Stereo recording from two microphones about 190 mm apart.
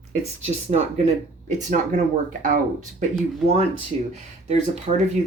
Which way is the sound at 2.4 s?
45° right (ahead or behind).